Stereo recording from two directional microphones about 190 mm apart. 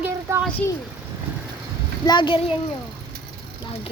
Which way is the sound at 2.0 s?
25° left (ahead or behind).